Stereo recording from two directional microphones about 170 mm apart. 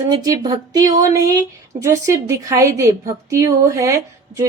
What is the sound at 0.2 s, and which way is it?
A woman's voice, 25° right (ahead or behind).